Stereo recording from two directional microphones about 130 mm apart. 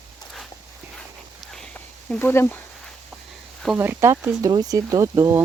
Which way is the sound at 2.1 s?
15° left (ahead or behind).